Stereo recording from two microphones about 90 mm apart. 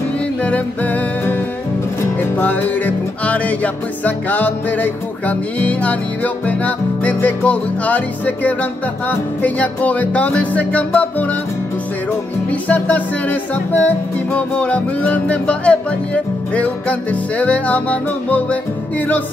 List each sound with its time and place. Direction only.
0.4 s music: 15° left (ahead or behind)
12.4 s music: 15° left (ahead or behind)